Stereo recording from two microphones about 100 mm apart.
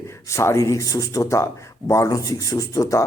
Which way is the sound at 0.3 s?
30° left (ahead or behind).